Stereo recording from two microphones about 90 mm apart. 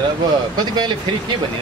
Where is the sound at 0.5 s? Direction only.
55° right (ahead or behind).